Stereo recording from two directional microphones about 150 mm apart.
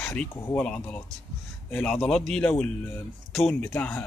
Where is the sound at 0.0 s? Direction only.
5° left (ahead or behind).